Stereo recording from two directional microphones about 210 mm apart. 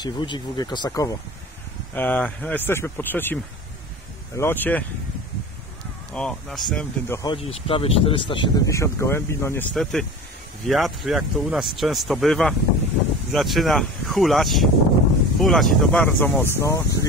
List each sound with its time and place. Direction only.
0.0 s speech: 20° left (ahead or behind)
4.4 s speech: 10° left (ahead or behind)
6.1 s speech: 5° left (ahead or behind)
7.3 s speech: 25° left (ahead or behind)
9.8 s speech: centre (ahead or behind)